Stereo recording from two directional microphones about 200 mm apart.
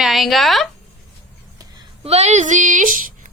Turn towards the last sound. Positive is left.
turn(degrees=-40)  # may be behind; listen again after turning